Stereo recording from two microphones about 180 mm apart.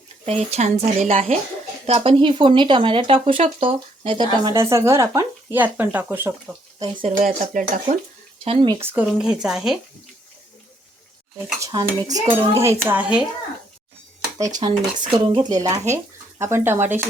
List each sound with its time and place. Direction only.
0.3 s a woman's voice: 35° right (ahead or behind)
4.5 s speech: 15° right (ahead or behind)
6.7 s speech: 30° right (ahead or behind)
7.2 s speech: 50° right (ahead or behind)
8.8 s speech: 10° right (ahead or behind)
11.6 s speech: 20° right (ahead or behind)
14.3 s speech: 20° right (ahead or behind)